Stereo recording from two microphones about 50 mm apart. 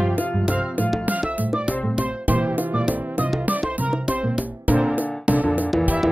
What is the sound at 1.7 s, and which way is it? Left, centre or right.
Music, right.